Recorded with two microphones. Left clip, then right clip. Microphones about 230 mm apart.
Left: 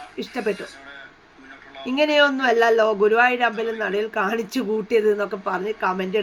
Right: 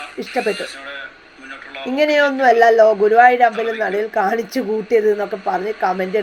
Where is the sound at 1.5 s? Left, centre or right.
Right.